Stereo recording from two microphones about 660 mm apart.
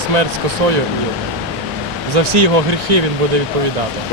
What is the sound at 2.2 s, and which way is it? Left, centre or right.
Speech, right.